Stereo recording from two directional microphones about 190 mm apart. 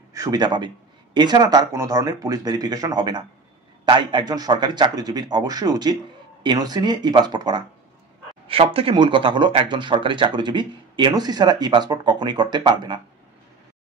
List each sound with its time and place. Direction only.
0.1 s a man's voice: 20° right (ahead or behind)